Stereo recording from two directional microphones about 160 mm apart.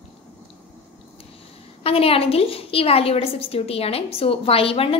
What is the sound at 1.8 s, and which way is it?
A woman's voice, 35° left (ahead or behind).